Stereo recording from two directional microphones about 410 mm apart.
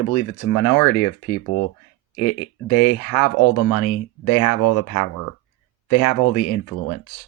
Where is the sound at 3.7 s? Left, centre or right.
Left.